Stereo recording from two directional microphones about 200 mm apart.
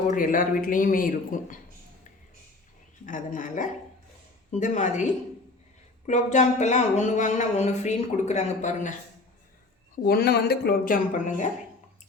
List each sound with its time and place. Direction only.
0.1 s speech: 45° left (ahead or behind)
3.1 s speech: 40° left (ahead or behind)
6.1 s speech: 35° left (ahead or behind)
9.9 s speech: 50° left (ahead or behind)